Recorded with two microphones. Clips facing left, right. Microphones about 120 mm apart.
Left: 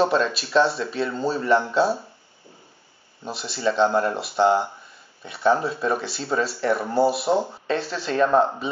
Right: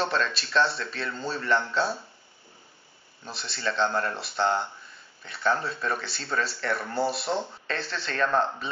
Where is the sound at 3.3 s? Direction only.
5° left (ahead or behind).